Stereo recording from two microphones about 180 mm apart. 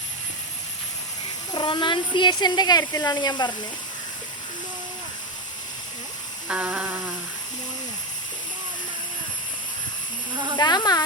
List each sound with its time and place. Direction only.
1.5 s speech: 25° left (ahead or behind)
6.5 s a sound: 5° right (ahead or behind)
10.6 s speech: 20° left (ahead or behind)